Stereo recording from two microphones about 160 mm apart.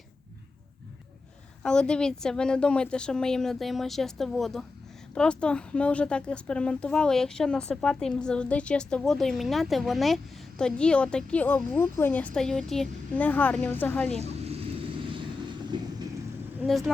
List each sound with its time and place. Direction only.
1.6 s a woman's voice: 5° left (ahead or behind)
14.2 s vehicle: 40° right (ahead or behind)
15.7 s vehicle: 30° right (ahead or behind)
16.6 s a woman's voice: centre (ahead or behind)